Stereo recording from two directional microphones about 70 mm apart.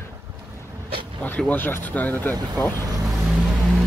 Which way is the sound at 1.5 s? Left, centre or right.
Left.